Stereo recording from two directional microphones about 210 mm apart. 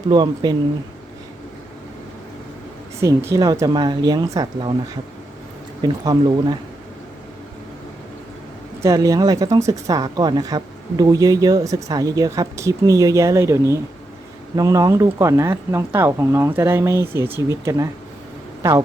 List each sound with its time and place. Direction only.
0.1 s speech: 20° right (ahead or behind)
3.0 s a woman's voice: 15° right (ahead or behind)
5.8 s speech: 20° right (ahead or behind)
8.8 s a woman's voice: 15° right (ahead or behind)